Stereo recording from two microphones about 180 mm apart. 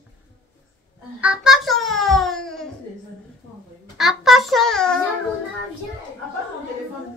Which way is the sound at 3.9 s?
Centre (ahead or behind).